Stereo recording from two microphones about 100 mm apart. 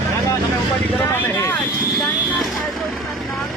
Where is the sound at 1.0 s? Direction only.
25° left (ahead or behind).